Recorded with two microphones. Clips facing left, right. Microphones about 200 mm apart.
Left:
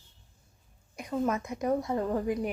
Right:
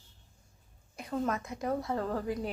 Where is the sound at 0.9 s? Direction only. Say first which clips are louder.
Left 3 dB; 15° left (ahead or behind).